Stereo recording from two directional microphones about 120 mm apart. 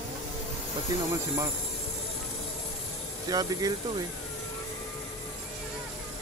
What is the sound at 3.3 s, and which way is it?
Speech, 30° right (ahead or behind).